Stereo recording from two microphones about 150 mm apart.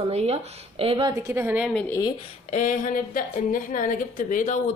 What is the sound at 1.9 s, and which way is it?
Speech, 25° left (ahead or behind).